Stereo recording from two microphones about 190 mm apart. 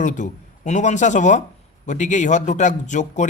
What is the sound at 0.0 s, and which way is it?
Speech, 40° left (ahead or behind).